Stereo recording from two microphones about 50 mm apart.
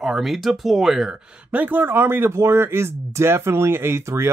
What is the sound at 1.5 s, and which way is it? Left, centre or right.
Speech, right.